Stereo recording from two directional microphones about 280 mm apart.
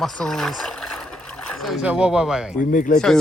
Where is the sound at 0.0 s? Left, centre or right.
Centre.